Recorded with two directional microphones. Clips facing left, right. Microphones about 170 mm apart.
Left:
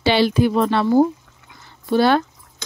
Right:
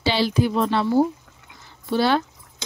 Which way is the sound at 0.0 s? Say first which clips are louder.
Left 5 dB; 60° left (ahead or behind).